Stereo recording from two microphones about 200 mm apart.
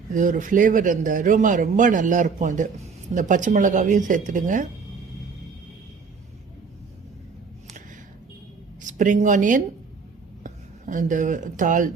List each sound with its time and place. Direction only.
0.1 s speech: 40° right (ahead or behind)
8.8 s speech: 40° right (ahead or behind)